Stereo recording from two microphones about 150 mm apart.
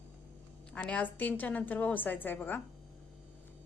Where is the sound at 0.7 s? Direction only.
10° left (ahead or behind).